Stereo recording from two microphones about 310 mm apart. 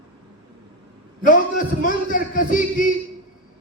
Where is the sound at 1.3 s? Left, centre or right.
Left.